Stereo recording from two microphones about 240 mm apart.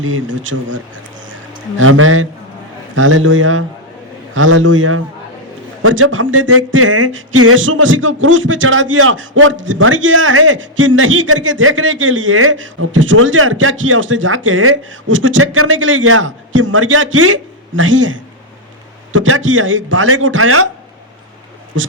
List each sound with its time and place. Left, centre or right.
0.0 s speech: right
1.8 s a man's voice: right